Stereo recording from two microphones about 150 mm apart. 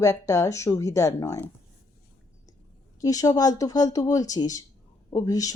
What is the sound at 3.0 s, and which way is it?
Speech, 25° left (ahead or behind).